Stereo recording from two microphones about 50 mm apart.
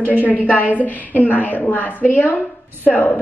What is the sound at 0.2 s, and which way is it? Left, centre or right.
A woman's voice, left.